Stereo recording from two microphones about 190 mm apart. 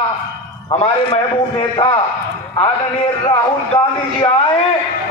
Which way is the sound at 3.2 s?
30° left (ahead or behind).